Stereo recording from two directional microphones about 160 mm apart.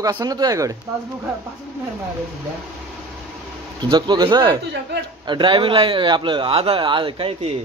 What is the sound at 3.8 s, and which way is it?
Speech, 25° right (ahead or behind).